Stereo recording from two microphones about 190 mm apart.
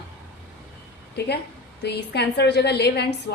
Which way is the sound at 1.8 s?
60° left (ahead or behind).